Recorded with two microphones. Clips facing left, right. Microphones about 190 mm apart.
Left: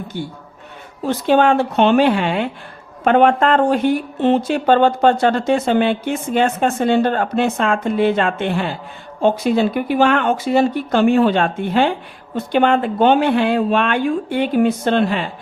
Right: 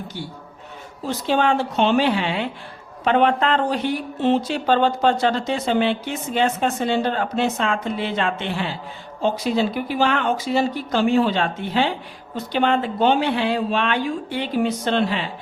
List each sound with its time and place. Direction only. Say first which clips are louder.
0.1 s a woman's voice: left 5 dB; 50° left (ahead or behind)